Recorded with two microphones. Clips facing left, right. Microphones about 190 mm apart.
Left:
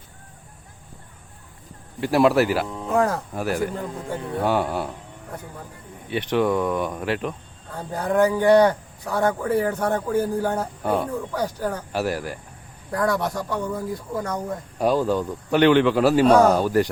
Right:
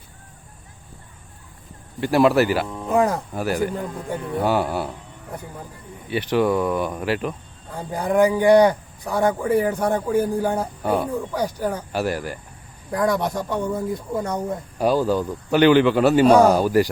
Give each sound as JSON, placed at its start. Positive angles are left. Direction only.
{"t": 2.0, "sound": "a man's voice", "side_deg": 0}
{"t": 2.8, "sound": "speech", "side_deg": -15}
{"t": 3.3, "sound": "a man's voice", "side_deg": 0}
{"t": 6.1, "sound": "a man's voice", "side_deg": 0}
{"t": 11.2, "sound": "speech", "side_deg": -15}
{"t": 11.9, "sound": "a man's voice", "side_deg": 0}
{"t": 12.9, "sound": "speech", "side_deg": -15}
{"t": 14.8, "sound": "a man's voice", "side_deg": 0}